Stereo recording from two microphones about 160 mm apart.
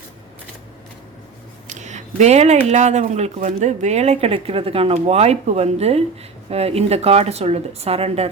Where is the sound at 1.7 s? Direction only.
45° right (ahead or behind).